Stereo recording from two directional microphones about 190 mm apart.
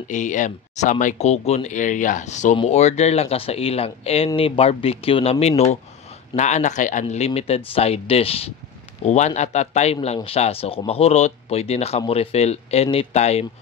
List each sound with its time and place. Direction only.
0.1 s speech: 40° left (ahead or behind)